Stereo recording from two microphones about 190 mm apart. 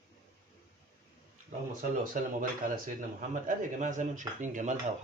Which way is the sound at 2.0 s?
45° right (ahead or behind).